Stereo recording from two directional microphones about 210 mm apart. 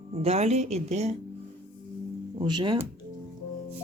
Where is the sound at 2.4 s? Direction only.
20° right (ahead or behind).